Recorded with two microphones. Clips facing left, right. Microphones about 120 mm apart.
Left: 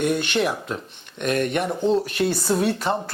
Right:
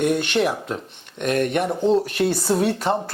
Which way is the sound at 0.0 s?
50° right (ahead or behind).